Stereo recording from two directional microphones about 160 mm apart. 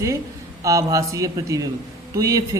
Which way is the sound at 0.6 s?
20° right (ahead or behind).